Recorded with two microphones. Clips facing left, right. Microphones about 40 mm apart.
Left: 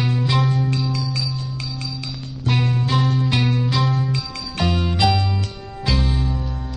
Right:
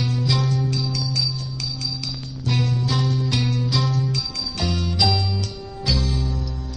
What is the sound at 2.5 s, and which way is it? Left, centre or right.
Music, left.